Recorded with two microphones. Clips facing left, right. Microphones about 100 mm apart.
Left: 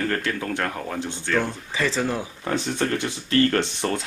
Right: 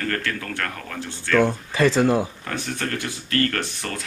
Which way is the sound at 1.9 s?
10° right (ahead or behind).